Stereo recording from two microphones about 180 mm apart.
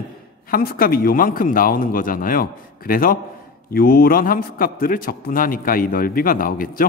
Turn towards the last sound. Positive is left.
turn(degrees=50)  # may be behind; listen again after turning